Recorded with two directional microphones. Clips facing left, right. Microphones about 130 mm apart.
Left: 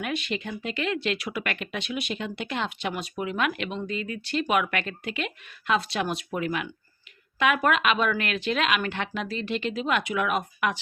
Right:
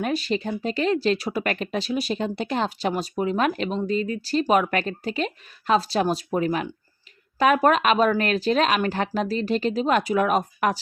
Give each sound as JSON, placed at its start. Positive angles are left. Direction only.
{"t": 0.0, "sound": "speech", "side_deg": -35}